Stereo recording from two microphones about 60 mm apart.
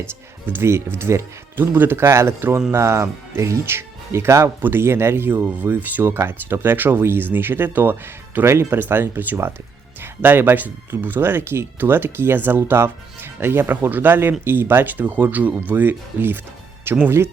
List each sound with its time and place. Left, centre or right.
0.0 s speech: right
4.6 s speech: right